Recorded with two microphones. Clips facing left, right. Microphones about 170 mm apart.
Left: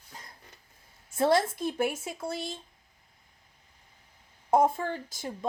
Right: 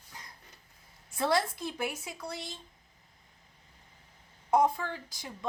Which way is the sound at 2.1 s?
25° left (ahead or behind).